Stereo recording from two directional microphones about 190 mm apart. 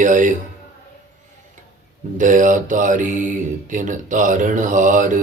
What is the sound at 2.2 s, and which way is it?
Speech, 45° right (ahead or behind).